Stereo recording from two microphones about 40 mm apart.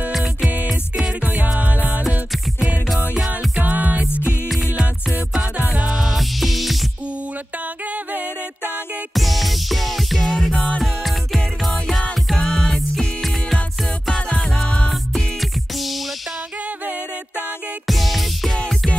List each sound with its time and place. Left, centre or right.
0.1 s music: centre
1.2 s music: right
3.3 s music: right
5.9 s music: centre
9.1 s music: centre
12.4 s music: centre
12.7 s music: centre
14.5 s music: left
14.9 s music: centre
17.8 s music: centre